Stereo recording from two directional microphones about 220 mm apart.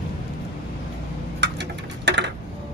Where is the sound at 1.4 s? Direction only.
50° right (ahead or behind).